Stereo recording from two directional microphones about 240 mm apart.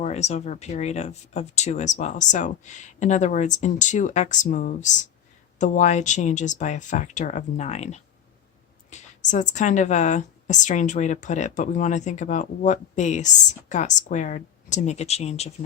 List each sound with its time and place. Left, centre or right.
0.0 s a woman's voice: left